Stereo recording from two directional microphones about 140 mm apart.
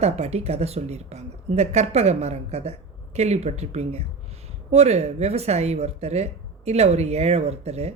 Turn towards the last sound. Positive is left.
turn(degrees=-50)  # may be behind; listen again after turning